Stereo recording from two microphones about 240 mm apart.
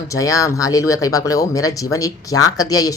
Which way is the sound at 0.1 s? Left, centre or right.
Centre.